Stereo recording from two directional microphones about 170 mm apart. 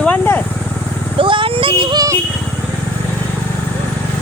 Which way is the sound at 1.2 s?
30° right (ahead or behind).